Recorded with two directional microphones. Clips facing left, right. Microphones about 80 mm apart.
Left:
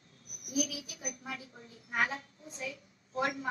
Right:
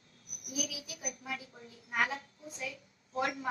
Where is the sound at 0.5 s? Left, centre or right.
Left.